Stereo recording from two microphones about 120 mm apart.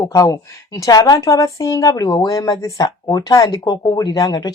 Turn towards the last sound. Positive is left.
turn(degrees=30)  # may be behind; listen again after turning